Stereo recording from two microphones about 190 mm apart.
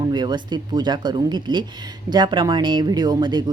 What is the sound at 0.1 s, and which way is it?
Speech, 25° right (ahead or behind).